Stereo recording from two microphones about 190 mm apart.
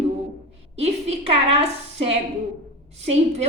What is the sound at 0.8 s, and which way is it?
A woman's voice, 35° right (ahead or behind).